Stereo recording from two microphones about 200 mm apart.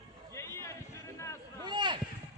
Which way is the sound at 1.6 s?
25° right (ahead or behind).